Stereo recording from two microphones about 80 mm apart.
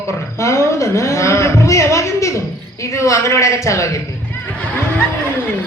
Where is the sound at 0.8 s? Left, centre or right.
Left.